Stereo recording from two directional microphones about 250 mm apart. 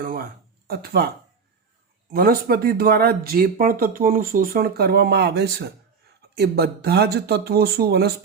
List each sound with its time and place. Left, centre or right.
0.0 s a sound: right
0.7 s speech: right
2.1 s speech: right